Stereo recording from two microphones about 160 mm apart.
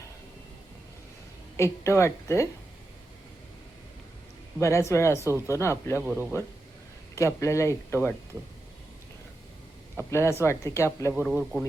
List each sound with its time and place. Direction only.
1.5 s a woman's voice: 15° left (ahead or behind)
4.6 s a woman's voice: 20° left (ahead or behind)
6.0 s a man's voice: 10° right (ahead or behind)
7.2 s a woman's voice: 15° left (ahead or behind)
10.1 s a woman's voice: 15° left (ahead or behind)
11.1 s speech: 5° right (ahead or behind)